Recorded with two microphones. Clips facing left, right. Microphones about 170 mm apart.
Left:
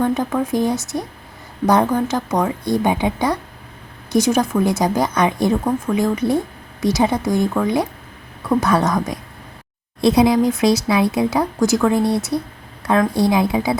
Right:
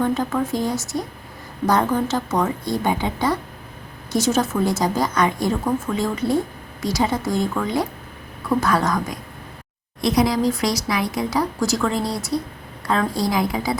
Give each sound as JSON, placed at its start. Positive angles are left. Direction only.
{"t": 0.1, "sound": "a woman's voice", "side_deg": 20}